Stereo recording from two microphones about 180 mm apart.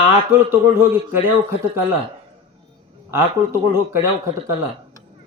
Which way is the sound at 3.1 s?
15° right (ahead or behind).